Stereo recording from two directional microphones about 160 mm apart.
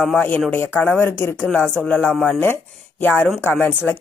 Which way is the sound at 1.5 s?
5° left (ahead or behind).